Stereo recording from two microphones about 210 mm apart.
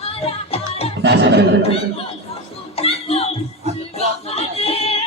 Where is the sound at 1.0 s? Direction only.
55° right (ahead or behind).